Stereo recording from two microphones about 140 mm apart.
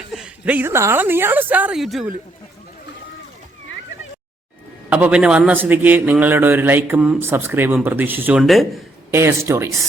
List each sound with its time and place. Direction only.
0.1 s a woman's voice: 5° right (ahead or behind)
1.8 s speech: centre (ahead or behind)
4.9 s a man's voice: 10° right (ahead or behind)
7.3 s a man's voice: 15° right (ahead or behind)
9.1 s speech: 20° right (ahead or behind)